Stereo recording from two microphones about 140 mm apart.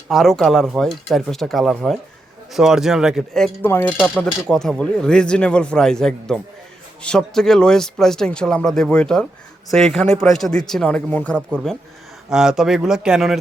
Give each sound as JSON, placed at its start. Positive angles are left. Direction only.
{"t": 0.1, "sound": "speech", "side_deg": 0}
{"t": 3.7, "sound": "speech", "side_deg": 15}
{"t": 3.9, "sound": "speech", "side_deg": -5}
{"t": 12.3, "sound": "speech", "side_deg": -5}